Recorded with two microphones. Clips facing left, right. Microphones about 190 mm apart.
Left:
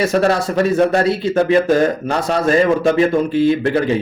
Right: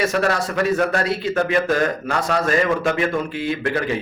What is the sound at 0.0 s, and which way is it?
A man's voice, 30° left (ahead or behind).